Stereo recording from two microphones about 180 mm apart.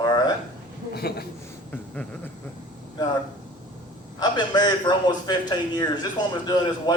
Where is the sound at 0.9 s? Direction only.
60° left (ahead or behind).